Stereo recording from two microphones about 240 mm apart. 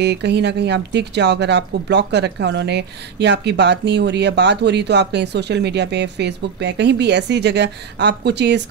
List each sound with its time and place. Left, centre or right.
0.0 s speech: right